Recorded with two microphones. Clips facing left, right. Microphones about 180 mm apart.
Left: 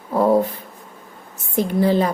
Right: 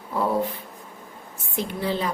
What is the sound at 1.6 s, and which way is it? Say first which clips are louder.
Speech: left 9 dB; 45° left (ahead or behind).